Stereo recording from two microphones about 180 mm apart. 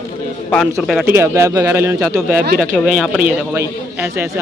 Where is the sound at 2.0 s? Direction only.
5° left (ahead or behind).